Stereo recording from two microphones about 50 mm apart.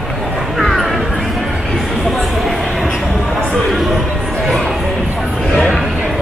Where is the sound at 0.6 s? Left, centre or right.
Centre.